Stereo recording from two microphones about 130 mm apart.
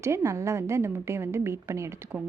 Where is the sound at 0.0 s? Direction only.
20° right (ahead or behind).